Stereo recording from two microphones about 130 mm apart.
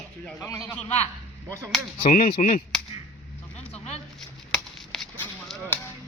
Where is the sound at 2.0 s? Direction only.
90° left.